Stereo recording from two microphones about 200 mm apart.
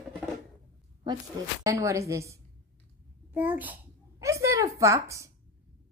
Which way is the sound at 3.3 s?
10° right (ahead or behind).